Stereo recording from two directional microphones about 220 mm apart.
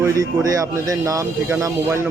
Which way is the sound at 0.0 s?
15° right (ahead or behind).